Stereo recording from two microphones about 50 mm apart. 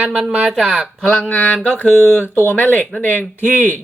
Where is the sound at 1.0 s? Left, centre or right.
Centre.